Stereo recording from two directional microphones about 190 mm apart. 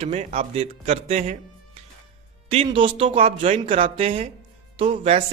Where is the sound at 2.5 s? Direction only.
30° right (ahead or behind).